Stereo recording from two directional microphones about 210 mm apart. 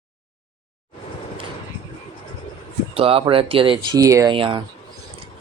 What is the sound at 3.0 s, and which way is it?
Speech, 25° right (ahead or behind).